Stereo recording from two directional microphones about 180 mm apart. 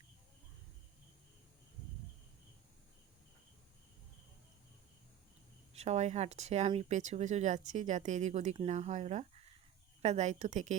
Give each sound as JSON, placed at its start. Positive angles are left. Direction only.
{"t": 5.7, "sound": "speech", "side_deg": -35}